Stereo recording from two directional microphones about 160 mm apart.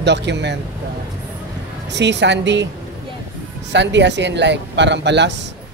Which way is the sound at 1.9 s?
90° right.